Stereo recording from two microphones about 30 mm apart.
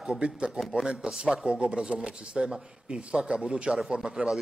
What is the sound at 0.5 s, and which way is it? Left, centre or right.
Speech, centre.